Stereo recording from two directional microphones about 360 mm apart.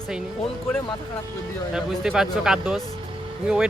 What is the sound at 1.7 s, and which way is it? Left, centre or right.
Speech, centre.